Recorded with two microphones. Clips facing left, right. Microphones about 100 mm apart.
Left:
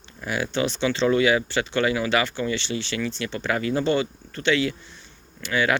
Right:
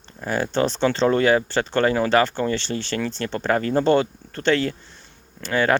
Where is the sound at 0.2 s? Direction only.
40° right (ahead or behind).